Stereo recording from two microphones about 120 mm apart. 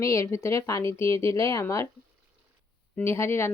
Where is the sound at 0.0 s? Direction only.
25° left (ahead or behind).